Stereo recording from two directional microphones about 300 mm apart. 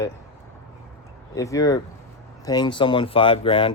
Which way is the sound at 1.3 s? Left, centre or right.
Centre.